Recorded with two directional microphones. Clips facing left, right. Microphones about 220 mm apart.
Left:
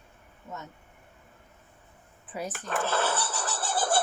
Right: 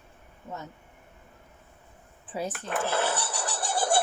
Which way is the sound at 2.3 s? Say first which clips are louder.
Right 3 dB; 30° right (ahead or behind).